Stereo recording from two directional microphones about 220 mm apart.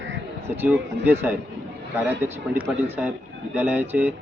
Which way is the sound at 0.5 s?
10° right (ahead or behind).